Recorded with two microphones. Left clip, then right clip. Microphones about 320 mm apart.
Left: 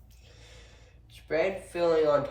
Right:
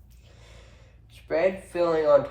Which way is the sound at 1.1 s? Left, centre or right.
Centre.